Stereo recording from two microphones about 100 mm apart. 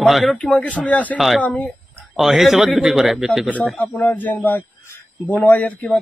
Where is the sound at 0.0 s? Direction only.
Centre (ahead or behind).